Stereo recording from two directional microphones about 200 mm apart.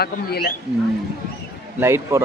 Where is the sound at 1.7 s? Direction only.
10° right (ahead or behind).